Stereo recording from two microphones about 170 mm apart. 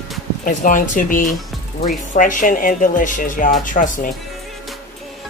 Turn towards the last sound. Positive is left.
turn(degrees=50)  # may be behind; listen again after turning